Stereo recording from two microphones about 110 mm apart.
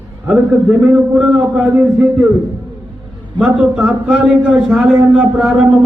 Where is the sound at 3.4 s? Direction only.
10° right (ahead or behind).